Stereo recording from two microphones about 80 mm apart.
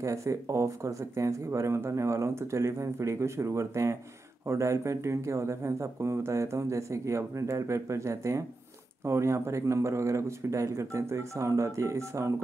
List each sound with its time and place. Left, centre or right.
0.0 s speech: right